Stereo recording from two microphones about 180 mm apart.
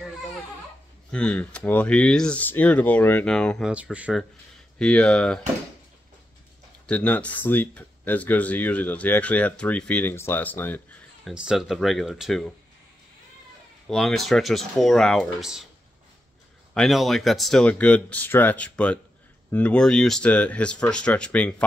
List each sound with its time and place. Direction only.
1.1 s speech: 5° left (ahead or behind)
4.7 s speech: 5° left (ahead or behind)
6.9 s speech: 5° left (ahead or behind)
11.2 s speech: 5° right (ahead or behind)
13.8 s speech: centre (ahead or behind)
16.7 s speech: centre (ahead or behind)